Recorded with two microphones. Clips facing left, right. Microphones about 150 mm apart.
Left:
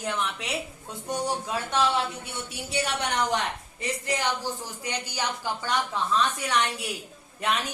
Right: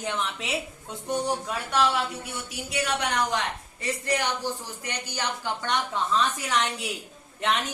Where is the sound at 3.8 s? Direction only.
15° left (ahead or behind).